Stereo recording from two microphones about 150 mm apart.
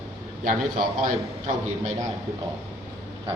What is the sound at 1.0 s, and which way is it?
Speech, 55° right (ahead or behind).